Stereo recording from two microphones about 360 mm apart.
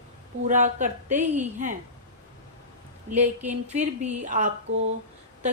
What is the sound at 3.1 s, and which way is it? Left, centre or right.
A woman's voice, centre.